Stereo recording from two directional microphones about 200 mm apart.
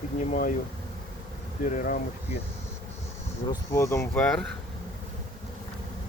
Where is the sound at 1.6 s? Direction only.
40° left (ahead or behind).